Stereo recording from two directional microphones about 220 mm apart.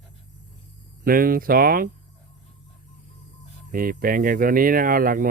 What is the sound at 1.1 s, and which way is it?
Speech, 40° right (ahead or behind).